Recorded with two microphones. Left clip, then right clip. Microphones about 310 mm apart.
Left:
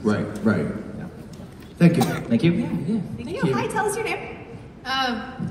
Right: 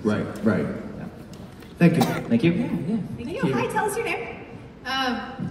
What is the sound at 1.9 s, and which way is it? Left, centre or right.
Speech, right.